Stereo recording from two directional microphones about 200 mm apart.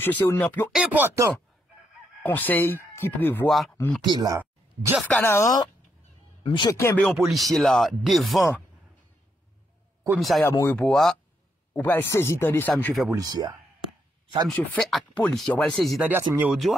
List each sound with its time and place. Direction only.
0.0 s speech: 10° left (ahead or behind)
0.7 s speech: 10° right (ahead or behind)
2.2 s speech: 10° left (ahead or behind)
4.0 s speech: 20° right (ahead or behind)
4.4 s a sound: 10° right (ahead or behind)
5.0 s speech: 10° left (ahead or behind)
7.1 s speech: centre (ahead or behind)
10.1 s speech: centre (ahead or behind)
13.1 s speech: 20° right (ahead or behind)
14.5 s speech: centre (ahead or behind)